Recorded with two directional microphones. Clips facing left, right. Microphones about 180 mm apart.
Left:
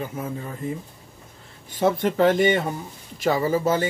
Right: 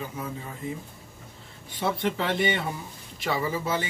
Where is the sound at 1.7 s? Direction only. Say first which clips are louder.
Left 6 dB; 45° left (ahead or behind).